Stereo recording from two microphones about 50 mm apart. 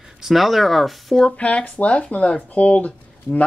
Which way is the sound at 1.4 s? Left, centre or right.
Left.